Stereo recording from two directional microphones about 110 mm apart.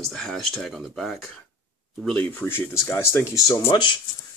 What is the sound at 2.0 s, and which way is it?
Speech, 15° left (ahead or behind).